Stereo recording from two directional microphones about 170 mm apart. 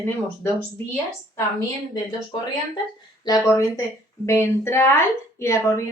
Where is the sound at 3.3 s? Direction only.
20° left (ahead or behind).